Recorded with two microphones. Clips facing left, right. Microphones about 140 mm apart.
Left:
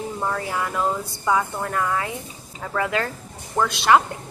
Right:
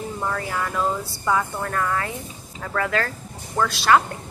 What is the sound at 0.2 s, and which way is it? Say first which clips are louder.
A woman's voice: left 1 dB; 10° left (ahead or behind).